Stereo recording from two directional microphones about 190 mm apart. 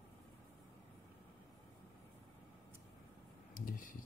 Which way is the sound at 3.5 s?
45° left (ahead or behind).